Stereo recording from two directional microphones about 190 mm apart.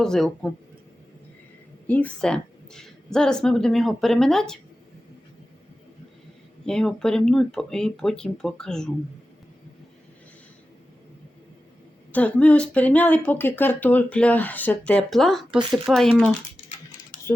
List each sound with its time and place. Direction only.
0.0 s a woman's voice: 5° left (ahead or behind)
1.9 s a woman's voice: 5° left (ahead or behind)
6.7 s a woman's voice: 5° left (ahead or behind)
12.1 s a woman's voice: 5° left (ahead or behind)
17.1 s typing: 45° left (ahead or behind)